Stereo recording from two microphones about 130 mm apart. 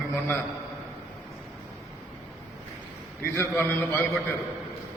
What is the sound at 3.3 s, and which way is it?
Speech, 15° left (ahead or behind).